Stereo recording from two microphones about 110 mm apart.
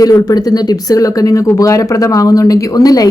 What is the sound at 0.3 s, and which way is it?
Speech, 35° left (ahead or behind).